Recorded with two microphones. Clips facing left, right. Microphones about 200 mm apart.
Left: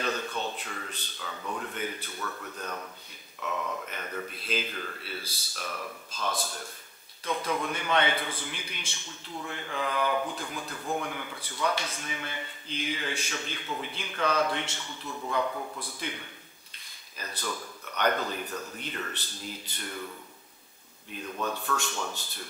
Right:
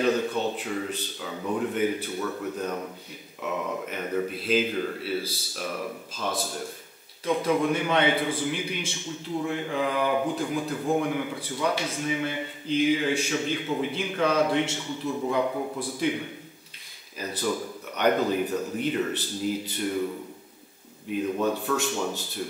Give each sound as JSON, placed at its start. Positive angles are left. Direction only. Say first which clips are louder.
{"t": 0.0, "sound": "a man's voice", "louder": "right 8 dB", "side_deg": -5}
{"t": 16.0, "sound": "a man's voice", "louder": "right 11 dB", "side_deg": -10}
{"t": 18.5, "sound": "a man's voice", "louder": "right 10 dB", "side_deg": -20}
{"t": 21.1, "sound": "a man's voice", "louder": "right 9 dB", "side_deg": -10}